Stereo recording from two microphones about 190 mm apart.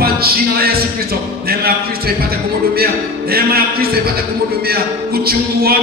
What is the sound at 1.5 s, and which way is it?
Music, 55° right (ahead or behind).